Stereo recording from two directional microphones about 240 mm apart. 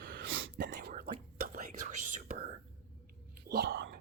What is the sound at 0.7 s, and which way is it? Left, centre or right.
Whispering, right.